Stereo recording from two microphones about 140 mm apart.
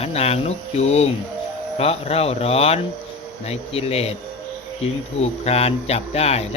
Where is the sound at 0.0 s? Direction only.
45° left (ahead or behind).